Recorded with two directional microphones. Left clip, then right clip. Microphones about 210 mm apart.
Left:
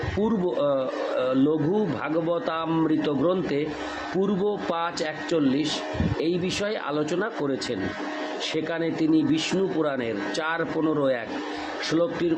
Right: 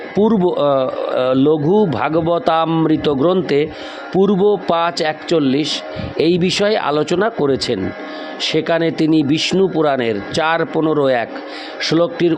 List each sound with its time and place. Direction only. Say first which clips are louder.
0.2 s speech: right 11 dB; 45° right (ahead or behind)